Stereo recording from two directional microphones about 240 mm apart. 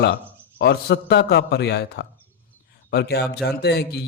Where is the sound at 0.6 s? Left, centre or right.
Left.